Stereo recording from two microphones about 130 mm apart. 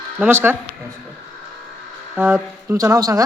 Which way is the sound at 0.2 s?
15° right (ahead or behind).